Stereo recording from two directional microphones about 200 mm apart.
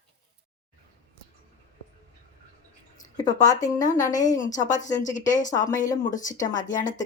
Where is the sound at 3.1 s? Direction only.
20° left (ahead or behind).